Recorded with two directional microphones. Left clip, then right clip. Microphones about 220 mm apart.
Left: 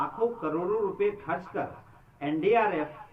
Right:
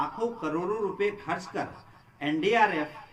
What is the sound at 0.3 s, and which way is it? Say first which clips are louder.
A man's voice: left 1 dB; 25° right (ahead or behind).